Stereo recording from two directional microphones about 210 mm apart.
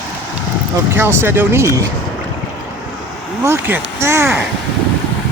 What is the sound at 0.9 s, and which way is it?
Speech, 10° right (ahead or behind).